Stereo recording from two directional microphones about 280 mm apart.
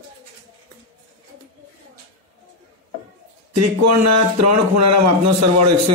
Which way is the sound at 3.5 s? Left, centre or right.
Right.